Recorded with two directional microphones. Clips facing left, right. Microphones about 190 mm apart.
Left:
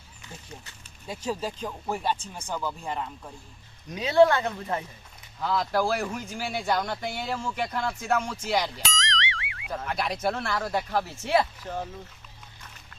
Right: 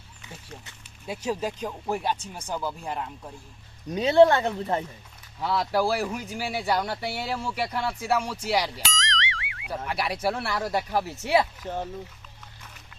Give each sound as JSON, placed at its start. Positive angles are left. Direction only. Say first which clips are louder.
{"t": 1.0, "sound": "speech", "louder": "right 2 dB", "side_deg": -10}
{"t": 3.9, "sound": "speech", "louder": "right 2 dB", "side_deg": -25}
{"t": 5.4, "sound": "speech", "louder": "right 1 dB", "side_deg": -10}
{"t": 8.4, "sound": "boing", "louder": "right 1 dB", "side_deg": -10}
{"t": 9.7, "sound": "speech", "louder": "right 1 dB", "side_deg": -10}